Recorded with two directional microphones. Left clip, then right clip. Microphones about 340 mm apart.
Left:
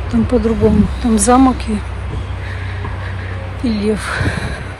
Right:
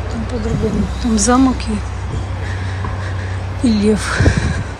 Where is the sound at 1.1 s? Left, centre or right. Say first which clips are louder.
Left 3 dB; centre.